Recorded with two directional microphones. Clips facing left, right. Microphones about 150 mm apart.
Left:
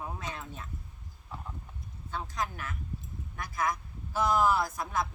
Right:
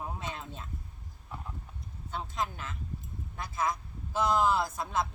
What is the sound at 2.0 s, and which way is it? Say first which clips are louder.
A man's voice: even; 20° right (ahead or behind).